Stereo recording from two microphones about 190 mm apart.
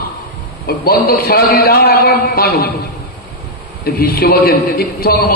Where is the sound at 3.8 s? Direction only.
55° left (ahead or behind).